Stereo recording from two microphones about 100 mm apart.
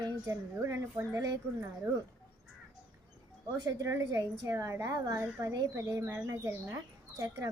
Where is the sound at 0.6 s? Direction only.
30° right (ahead or behind).